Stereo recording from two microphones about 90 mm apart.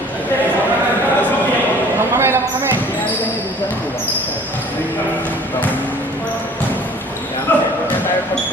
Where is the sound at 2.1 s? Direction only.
30° right (ahead or behind).